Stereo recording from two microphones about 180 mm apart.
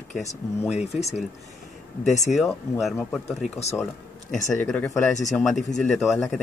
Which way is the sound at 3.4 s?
40° left (ahead or behind).